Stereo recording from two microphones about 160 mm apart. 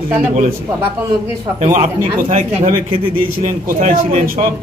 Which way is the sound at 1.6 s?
45° right (ahead or behind).